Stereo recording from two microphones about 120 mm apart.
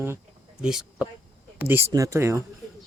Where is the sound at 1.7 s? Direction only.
25° right (ahead or behind).